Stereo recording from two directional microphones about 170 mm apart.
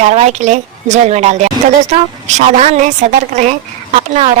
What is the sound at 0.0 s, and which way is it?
A woman's voice, 40° right (ahead or behind).